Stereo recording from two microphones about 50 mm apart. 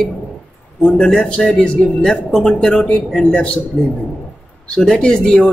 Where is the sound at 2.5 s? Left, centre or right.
Left.